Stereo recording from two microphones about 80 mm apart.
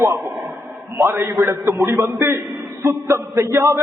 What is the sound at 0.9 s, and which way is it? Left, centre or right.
Speech, right.